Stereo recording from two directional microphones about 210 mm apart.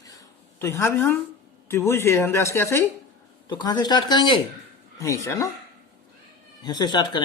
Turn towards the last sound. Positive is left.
turn(degrees=20)  # may be behind; listen again after turning